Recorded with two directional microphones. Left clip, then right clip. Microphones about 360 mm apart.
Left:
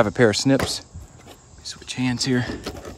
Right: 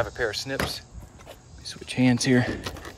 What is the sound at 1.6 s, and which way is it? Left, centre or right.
Speech, centre.